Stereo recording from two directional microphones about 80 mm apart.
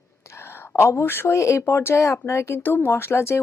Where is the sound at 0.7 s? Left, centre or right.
Left.